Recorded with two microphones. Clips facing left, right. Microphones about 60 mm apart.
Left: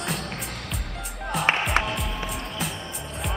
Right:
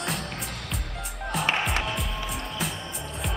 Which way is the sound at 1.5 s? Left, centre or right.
Left.